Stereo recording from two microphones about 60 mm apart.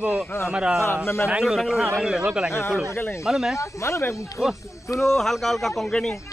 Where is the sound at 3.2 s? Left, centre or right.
Centre.